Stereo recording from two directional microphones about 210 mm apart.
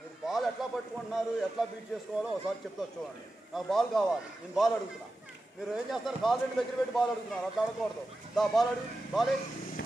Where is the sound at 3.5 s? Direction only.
Centre (ahead or behind).